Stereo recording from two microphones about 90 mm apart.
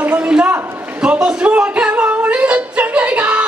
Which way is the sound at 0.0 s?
15° right (ahead or behind).